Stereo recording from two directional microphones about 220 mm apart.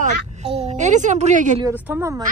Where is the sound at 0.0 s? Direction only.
30° right (ahead or behind).